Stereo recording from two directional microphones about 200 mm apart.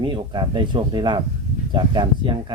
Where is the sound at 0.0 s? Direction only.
25° right (ahead or behind).